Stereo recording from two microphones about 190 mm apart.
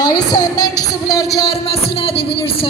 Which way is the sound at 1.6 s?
30° left (ahead or behind).